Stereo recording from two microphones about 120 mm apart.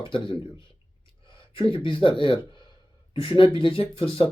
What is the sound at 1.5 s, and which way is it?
Speech, 45° left (ahead or behind).